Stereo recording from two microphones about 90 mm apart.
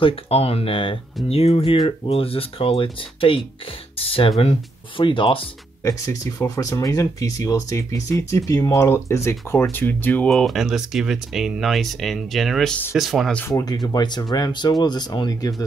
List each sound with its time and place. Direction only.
0.0 s speech: 90° left
4.0 s speech: 90° left
4.9 s speech: 70° left (ahead or behind)
5.9 s speech: 35° left (ahead or behind)
10.3 s speech: centre (ahead or behind)
13.5 s speech: 40° left (ahead or behind)
13.9 s speech: 50° left (ahead or behind)